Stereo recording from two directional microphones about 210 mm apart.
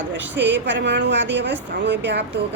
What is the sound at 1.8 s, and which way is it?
Speech, 55° right (ahead or behind).